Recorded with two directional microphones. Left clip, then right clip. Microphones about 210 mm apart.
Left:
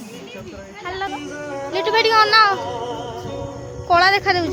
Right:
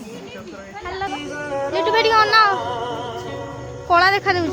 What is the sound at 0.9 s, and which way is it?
Speech, 5° left (ahead or behind).